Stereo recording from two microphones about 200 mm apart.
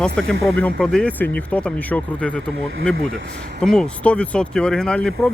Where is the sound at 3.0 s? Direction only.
70° right (ahead or behind).